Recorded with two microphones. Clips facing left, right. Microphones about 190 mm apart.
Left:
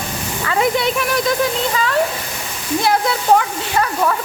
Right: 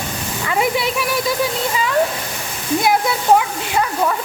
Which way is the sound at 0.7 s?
5° right (ahead or behind).